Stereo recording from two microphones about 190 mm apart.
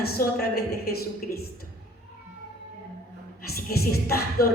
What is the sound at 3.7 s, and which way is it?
Speech, 55° left (ahead or behind).